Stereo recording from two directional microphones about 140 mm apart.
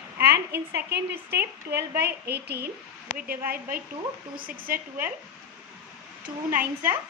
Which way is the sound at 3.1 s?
90° right.